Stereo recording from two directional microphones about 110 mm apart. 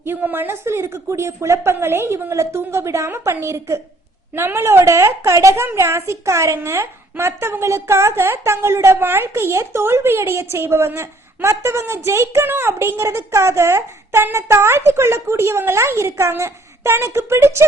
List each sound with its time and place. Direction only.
0.0 s a woman's voice: 20° right (ahead or behind)